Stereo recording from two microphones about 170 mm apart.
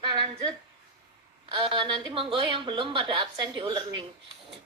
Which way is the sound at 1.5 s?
30° right (ahead or behind).